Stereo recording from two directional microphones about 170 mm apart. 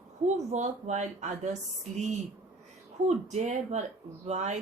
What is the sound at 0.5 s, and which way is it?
Speech, 45° right (ahead or behind).